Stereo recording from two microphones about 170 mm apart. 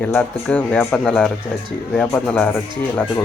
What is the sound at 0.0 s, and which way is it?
Speech, 10° left (ahead or behind).